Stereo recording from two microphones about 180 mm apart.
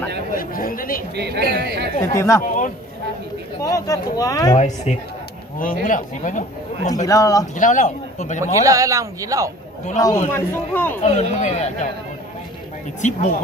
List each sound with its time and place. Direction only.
0.3 s chatter: 50° left (ahead or behind)
1.1 s a woman's voice: 70° right (ahead or behind)
2.1 s speech: 15° left (ahead or behind)
3.6 s speech: 20° left (ahead or behind)
4.6 s a man's voice: 40° left (ahead or behind)
7.1 s speech: 20° left (ahead or behind)
7.5 s a man's voice: 45° left (ahead or behind)
8.6 s speech: 20° right (ahead or behind)
10.0 s speech: 20° left (ahead or behind)
11.0 s a man's voice: 40° left (ahead or behind)
13.0 s a man's voice: 40° left (ahead or behind)